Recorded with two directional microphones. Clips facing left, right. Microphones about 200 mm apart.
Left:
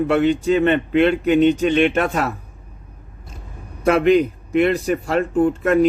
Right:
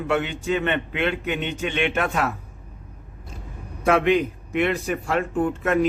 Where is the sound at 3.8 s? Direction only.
40° left (ahead or behind).